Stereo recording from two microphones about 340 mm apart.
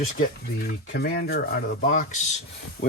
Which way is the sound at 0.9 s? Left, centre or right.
Left.